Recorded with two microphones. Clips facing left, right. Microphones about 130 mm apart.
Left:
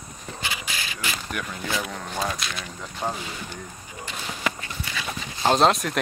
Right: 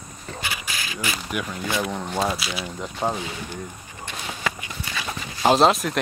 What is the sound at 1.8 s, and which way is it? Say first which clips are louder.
Speech: right 6 dB; 20° right (ahead or behind).